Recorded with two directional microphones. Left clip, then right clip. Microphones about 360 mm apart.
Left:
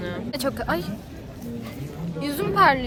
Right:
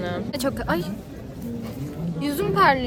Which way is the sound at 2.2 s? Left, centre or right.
Centre.